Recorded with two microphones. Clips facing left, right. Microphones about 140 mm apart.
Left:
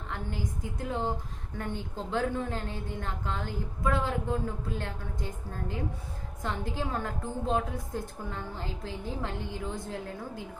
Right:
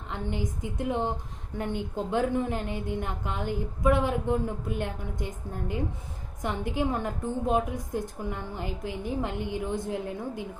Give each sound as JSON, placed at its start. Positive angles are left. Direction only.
{"t": 0.1, "sound": "a woman's voice", "side_deg": -20}